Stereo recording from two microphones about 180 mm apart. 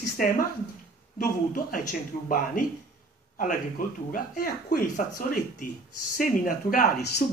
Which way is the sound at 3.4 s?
50° left (ahead or behind).